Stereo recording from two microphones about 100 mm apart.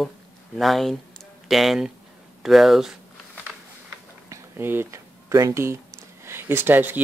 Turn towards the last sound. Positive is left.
turn(degrees=-20)  # may be behind; listen again after turning